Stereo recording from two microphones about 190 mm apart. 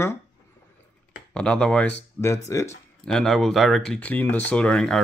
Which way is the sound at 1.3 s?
5° left (ahead or behind).